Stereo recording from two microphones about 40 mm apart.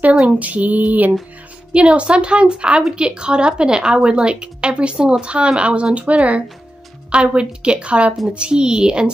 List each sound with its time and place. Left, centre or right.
0.4 s female singing: right
1.7 s a woman's voice: right
5.9 s female singing: right
7.1 s a woman's voice: right